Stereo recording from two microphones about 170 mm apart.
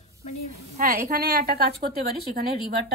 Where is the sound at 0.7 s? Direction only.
60° right (ahead or behind).